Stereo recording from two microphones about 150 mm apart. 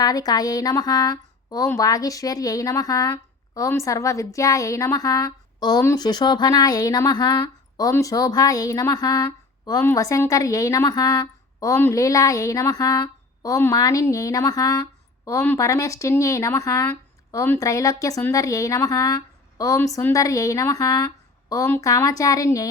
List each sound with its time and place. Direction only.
0.0 s speech: 25° left (ahead or behind)